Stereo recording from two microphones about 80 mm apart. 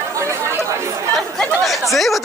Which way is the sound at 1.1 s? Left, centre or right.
Centre.